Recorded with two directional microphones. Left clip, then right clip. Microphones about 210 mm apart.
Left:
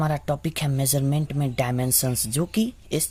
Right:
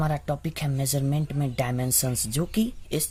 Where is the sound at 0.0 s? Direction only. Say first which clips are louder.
Left 3 dB; 20° left (ahead or behind).